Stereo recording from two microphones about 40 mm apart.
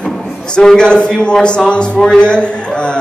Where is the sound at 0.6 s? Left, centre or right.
Left.